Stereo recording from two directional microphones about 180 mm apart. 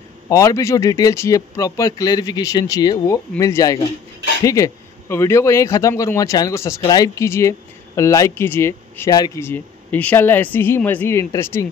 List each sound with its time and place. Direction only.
0.3 s speech: 15° left (ahead or behind)